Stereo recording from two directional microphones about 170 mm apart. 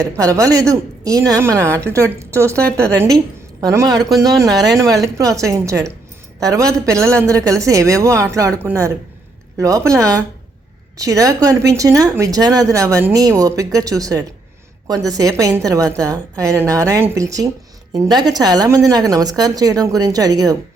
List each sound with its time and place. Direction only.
0.0 s speech: 20° right (ahead or behind)